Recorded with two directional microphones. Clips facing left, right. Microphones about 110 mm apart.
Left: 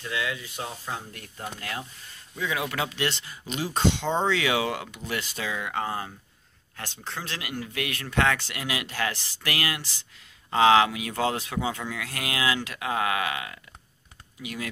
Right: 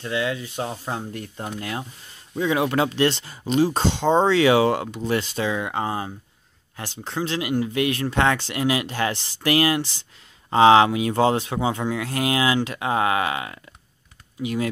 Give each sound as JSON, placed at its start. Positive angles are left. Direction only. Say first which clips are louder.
{"t": 0.0, "sound": "speech", "louder": "right 6 dB", "side_deg": -30}